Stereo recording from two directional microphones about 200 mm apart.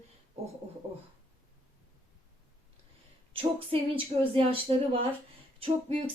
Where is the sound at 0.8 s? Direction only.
25° right (ahead or behind).